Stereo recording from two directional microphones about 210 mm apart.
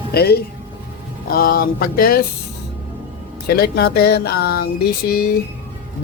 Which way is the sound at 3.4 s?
50° left (ahead or behind).